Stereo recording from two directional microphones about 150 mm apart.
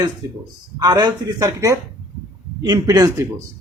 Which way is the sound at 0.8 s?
25° right (ahead or behind).